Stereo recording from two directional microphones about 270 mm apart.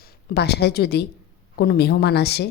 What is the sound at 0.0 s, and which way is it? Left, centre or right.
A woman's voice, left.